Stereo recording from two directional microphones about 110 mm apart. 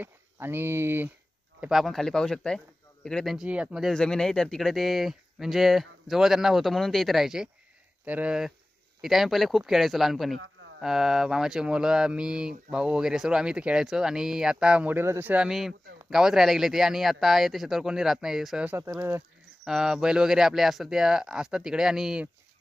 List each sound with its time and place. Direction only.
0.0 s speech: 20° right (ahead or behind)
1.6 s speech: centre (ahead or behind)
3.3 s speech: 10° right (ahead or behind)
3.9 s speech: 5° left (ahead or behind)
18.7 s speech: 20° right (ahead or behind)
19.6 s speech: 5° right (ahead or behind)